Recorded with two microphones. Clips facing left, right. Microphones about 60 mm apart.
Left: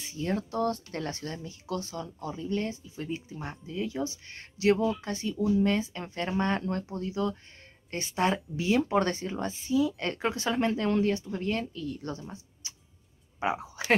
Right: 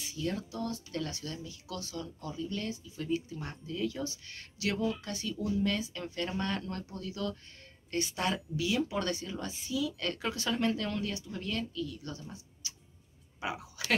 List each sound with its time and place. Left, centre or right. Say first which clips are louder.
0.1 s speech: left 5 dB; left